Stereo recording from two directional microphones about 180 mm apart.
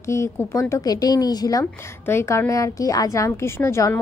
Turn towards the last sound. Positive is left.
turn(degrees=15)  # may be behind; listen again after turning